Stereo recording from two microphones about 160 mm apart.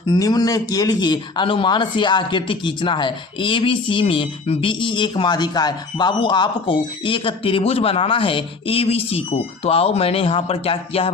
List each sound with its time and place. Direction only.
0.1 s a man's voice: 25° left (ahead or behind)